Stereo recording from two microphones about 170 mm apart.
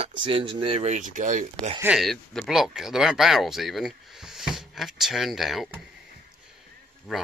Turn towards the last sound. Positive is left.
turn(degrees=-5)  # may be behind; listen again after turning